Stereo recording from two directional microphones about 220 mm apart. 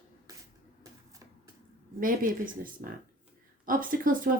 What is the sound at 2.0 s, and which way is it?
Speech, 40° right (ahead or behind).